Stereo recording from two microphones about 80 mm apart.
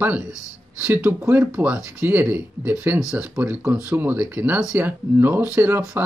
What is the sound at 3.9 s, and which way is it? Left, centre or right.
Speech, right.